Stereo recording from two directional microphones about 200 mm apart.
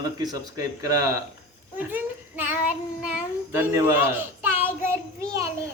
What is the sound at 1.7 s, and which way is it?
Child singing, 10° right (ahead or behind).